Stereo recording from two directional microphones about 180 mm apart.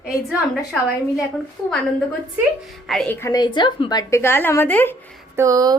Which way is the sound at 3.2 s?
20° left (ahead or behind).